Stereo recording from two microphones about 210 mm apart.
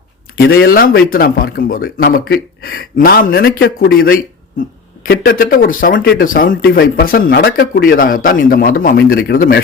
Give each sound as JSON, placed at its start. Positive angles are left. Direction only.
{"t": 0.3, "sound": "speech", "side_deg": 55}